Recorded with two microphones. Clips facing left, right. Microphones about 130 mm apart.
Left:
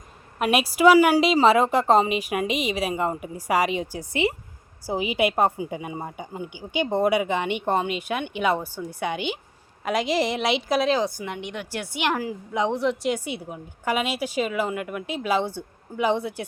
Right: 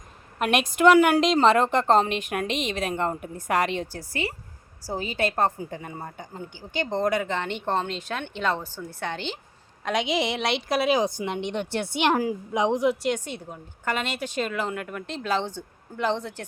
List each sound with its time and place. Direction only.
0.3 s a woman's voice: 5° left (ahead or behind)
4.1 s a woman's voice: 20° left (ahead or behind); by 10.9 s centre (ahead or behind)
10.9 s a woman's voice: 20° right (ahead or behind)
13.0 s a woman's voice: 5° left (ahead or behind)